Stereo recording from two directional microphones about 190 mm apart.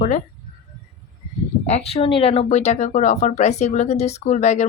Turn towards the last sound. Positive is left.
turn(degrees=40)  # may be behind; listen again after turning